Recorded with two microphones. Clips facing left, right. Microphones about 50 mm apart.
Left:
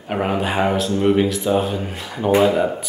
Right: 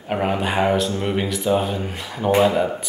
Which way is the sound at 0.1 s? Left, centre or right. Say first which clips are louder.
Left 1 dB; centre.